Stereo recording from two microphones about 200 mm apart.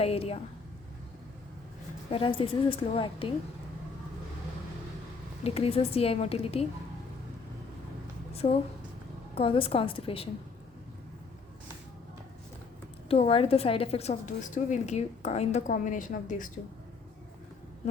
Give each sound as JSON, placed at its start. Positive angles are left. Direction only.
{"t": 0.0, "sound": "a woman's voice", "side_deg": 30}
{"t": 2.0, "sound": "a woman's voice", "side_deg": 25}
{"t": 5.4, "sound": "a woman's voice", "side_deg": 30}
{"t": 9.3, "sound": "a woman's voice", "side_deg": 25}
{"t": 13.1, "sound": "a woman's voice", "side_deg": 30}